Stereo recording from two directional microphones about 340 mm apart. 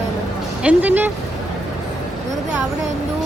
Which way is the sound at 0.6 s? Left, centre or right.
Centre.